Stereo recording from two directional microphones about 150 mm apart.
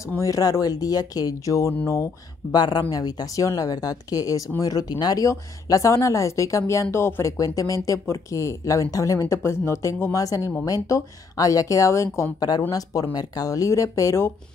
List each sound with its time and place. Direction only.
0.1 s speech: 20° left (ahead or behind)